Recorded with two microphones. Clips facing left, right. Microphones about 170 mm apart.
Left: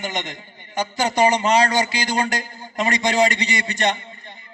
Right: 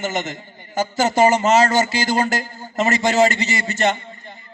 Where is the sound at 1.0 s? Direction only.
45° right (ahead or behind).